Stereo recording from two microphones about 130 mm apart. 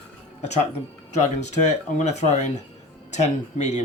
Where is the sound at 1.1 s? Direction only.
65° left (ahead or behind).